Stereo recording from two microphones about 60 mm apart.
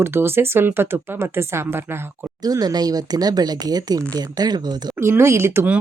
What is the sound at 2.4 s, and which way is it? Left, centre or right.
Speech, right.